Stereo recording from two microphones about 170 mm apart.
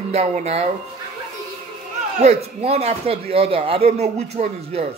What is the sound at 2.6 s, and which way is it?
Speech, 35° right (ahead or behind).